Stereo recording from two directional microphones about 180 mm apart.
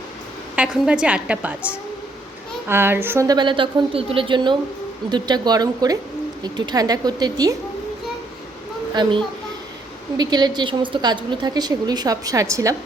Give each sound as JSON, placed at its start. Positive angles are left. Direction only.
{"t": 0.5, "sound": "a woman's voice", "side_deg": -5}
{"t": 9.0, "sound": "a woman's voice", "side_deg": -25}
{"t": 10.2, "sound": "a woman's voice", "side_deg": -25}